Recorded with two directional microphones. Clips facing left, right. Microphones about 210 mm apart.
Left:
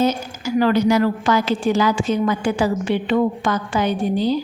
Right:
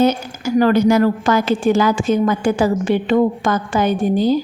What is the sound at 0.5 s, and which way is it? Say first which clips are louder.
A woman's voice: right 3 dB; 45° right (ahead or behind).